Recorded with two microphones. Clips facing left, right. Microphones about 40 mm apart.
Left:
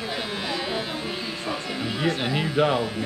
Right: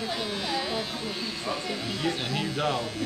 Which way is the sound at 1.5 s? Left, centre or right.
Centre.